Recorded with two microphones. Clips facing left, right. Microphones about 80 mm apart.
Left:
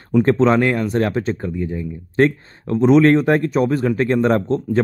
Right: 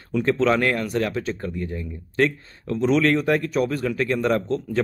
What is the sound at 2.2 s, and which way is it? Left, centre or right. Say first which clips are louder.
Speech: left 5 dB; left.